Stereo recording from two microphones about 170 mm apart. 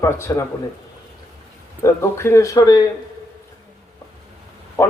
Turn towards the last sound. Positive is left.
turn(degrees=15)  # may be behind; listen again after turning